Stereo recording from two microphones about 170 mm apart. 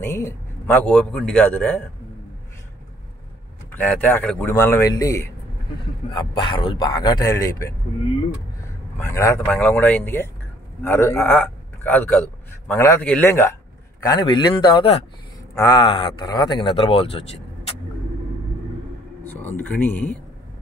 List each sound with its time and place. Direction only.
0.0 s a man's voice: 15° left (ahead or behind)
3.7 s a man's voice: 10° left (ahead or behind)
6.1 s a man's voice: 30° left (ahead or behind)
9.0 s a man's voice: 15° left (ahead or behind); by 17.2 s 35° left (ahead or behind)
19.2 s speech: 10° left (ahead or behind)